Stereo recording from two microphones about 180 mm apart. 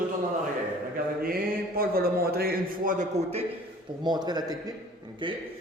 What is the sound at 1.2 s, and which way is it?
A man's voice, 55° right (ahead or behind).